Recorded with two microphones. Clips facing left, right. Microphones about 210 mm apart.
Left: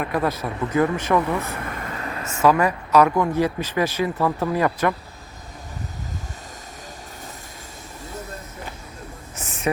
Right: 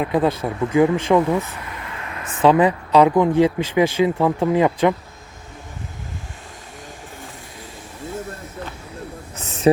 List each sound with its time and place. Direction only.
0.0 s speech: 20° right (ahead or behind)
1.4 s vehicle: 55° left (ahead or behind); by 2.2 s 40° left (ahead or behind)
2.2 s speech: 30° right (ahead or behind)
2.6 s speech: 20° right (ahead or behind)
9.7 s speech: 30° right (ahead or behind)